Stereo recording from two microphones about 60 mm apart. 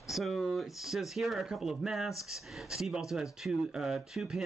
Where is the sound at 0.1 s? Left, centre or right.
Centre.